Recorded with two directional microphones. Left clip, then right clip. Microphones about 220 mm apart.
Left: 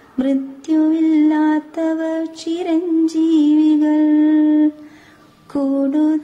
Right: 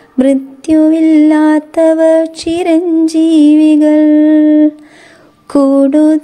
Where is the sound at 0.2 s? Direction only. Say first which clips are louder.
Right 9 dB; 35° right (ahead or behind).